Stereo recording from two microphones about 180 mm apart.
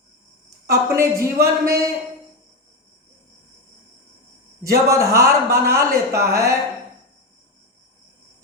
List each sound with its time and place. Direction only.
0.7 s speech: 15° right (ahead or behind)
4.6 s speech: 15° right (ahead or behind)